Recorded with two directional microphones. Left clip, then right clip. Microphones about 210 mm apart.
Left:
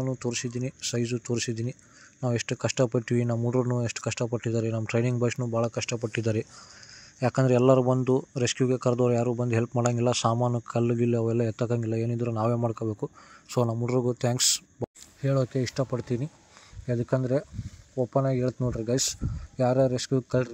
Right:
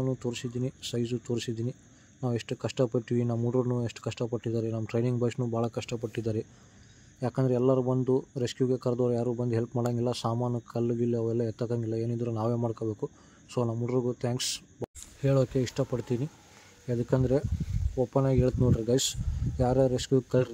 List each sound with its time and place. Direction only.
0.0 s speech: 10° left (ahead or behind)